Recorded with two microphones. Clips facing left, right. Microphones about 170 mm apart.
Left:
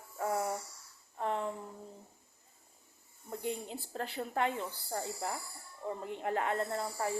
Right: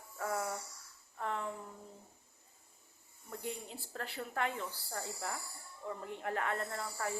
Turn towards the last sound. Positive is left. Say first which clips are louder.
# left 5 dB
turn(degrees=25)  # may be behind; listen again after turning